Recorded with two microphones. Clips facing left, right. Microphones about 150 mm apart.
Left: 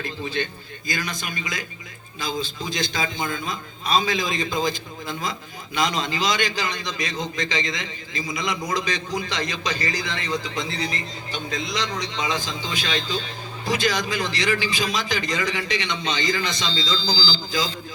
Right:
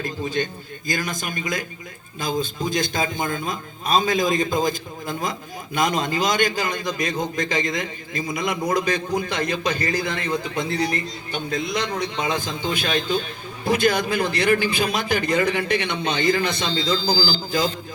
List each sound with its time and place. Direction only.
0.0 s a man's voice: 45° right (ahead or behind)